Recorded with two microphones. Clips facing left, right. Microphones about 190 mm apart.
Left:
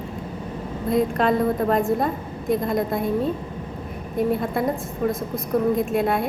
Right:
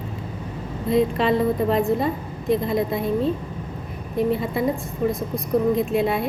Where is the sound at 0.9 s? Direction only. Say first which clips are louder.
Right 1 dB; centre (ahead or behind).